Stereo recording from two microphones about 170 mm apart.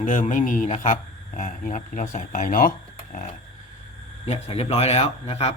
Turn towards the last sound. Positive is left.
turn(degrees=35)  # may be behind; listen again after turning